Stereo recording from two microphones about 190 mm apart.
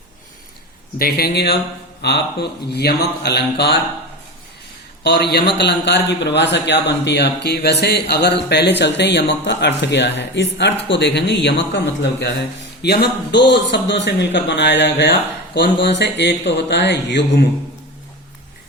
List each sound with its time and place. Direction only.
0.9 s a man's voice: 55° left (ahead or behind)
5.0 s a man's voice: 60° left (ahead or behind)
12.8 s a man's voice: 60° left (ahead or behind)